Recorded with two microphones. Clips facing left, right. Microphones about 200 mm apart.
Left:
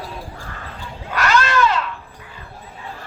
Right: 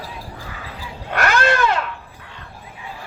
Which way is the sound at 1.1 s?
55° right (ahead or behind).